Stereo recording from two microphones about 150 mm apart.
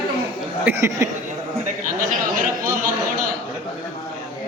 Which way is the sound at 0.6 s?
15° right (ahead or behind).